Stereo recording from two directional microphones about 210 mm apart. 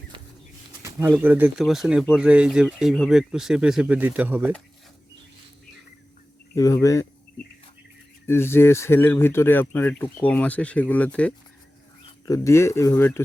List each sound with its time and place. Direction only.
0.8 s pigeon: 15° right (ahead or behind)
1.1 s speech: 10° right (ahead or behind)
6.5 s speech: 15° left (ahead or behind)
8.3 s speech: 10° left (ahead or behind)